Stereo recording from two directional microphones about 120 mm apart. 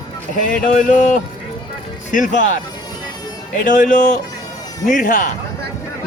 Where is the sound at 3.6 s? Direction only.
90° left.